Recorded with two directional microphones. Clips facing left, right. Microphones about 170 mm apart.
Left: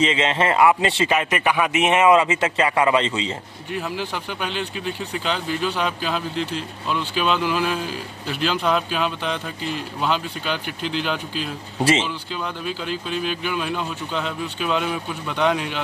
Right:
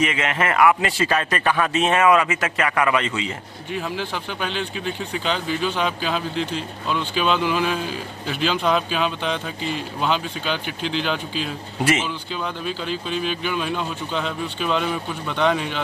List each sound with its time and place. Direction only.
0.0 s speech: 25° left (ahead or behind)
1.1 s speech: 15° left (ahead or behind)
3.7 s speech: 5° left (ahead or behind)